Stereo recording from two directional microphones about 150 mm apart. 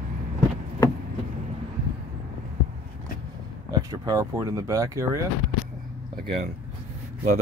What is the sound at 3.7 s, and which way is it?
Speech, 20° right (ahead or behind).